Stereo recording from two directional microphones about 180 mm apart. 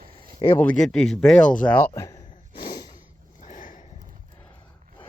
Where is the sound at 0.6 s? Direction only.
5° left (ahead or behind).